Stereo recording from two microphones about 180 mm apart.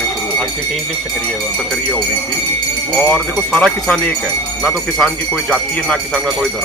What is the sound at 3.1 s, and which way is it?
Speech, 5° left (ahead or behind).